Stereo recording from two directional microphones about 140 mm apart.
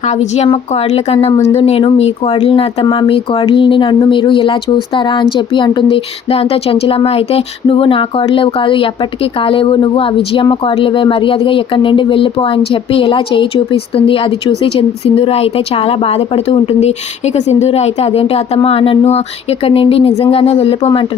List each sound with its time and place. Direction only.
0.1 s speech: 50° left (ahead or behind)